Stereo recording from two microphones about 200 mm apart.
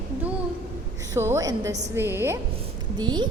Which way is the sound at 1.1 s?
15° right (ahead or behind).